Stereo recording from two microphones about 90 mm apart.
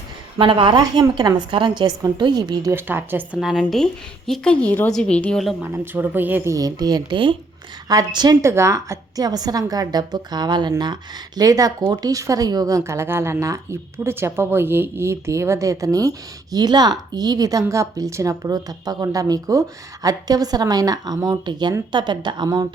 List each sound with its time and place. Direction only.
0.3 s a woman's voice: 75° right (ahead or behind)
1.2 s a woman's voice: 65° right (ahead or behind)
2.7 s speech: 25° right (ahead or behind)
3.4 s speech: 5° right (ahead or behind)
4.3 s a woman's voice: 10° left (ahead or behind)
5.4 s speech: centre (ahead or behind)
5.7 s speech: 25° right (ahead or behind)
6.5 s a woman's voice: 45° right (ahead or behind); by 7.3 s 65° right (ahead or behind)
7.9 s a woman's voice: 50° right (ahead or behind)
8.4 s a woman's voice: 30° right (ahead or behind); by 10.9 s 55° right (ahead or behind)
11.3 s a woman's voice: 45° right (ahead or behind); by 22.4 s 60° right (ahead or behind)